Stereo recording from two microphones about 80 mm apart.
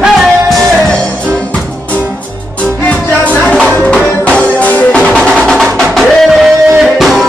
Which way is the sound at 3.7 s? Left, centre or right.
Centre.